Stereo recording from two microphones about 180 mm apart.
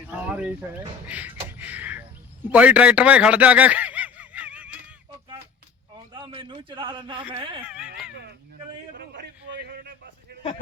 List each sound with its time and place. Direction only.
0.1 s speech: 10° right (ahead or behind)
1.0 s a sound: 10° right (ahead or behind)
2.5 s speech: 10° right (ahead or behind)
6.1 s a man's voice: 25° right (ahead or behind)
7.7 s a sound: 5° right (ahead or behind)
9.0 s a man's voice: 70° right (ahead or behind)